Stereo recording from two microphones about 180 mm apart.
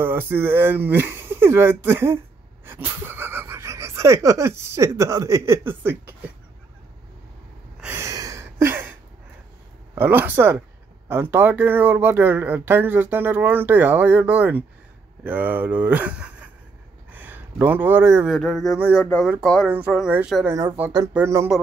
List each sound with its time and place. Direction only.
0.0 s speech: 10° right (ahead or behind)
7.8 s a sound: 15° right (ahead or behind)
9.9 s speech: 10° right (ahead or behind)
18.3 s a woman's voice: centre (ahead or behind)
19.0 s a woman's voice: 5° left (ahead or behind)
20.4 s speech: 15° right (ahead or behind)